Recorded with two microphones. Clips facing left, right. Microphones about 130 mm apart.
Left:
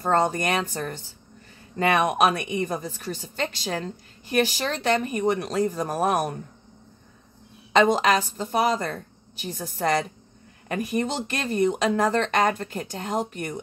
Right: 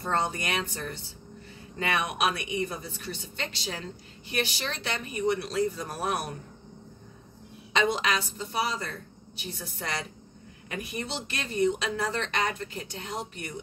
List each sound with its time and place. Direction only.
0.0 s a woman's voice: 45° left (ahead or behind)
7.7 s a woman's voice: 45° left (ahead or behind)